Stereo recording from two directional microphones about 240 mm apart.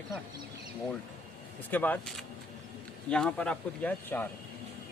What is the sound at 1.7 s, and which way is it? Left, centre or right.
Speech, centre.